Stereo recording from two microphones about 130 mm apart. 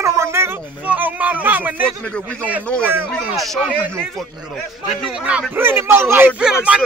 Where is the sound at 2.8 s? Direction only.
15° right (ahead or behind).